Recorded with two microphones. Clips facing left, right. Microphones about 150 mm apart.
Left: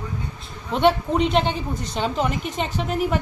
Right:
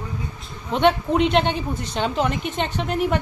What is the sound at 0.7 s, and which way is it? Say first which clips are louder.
A woman's voice: even; centre (ahead or behind).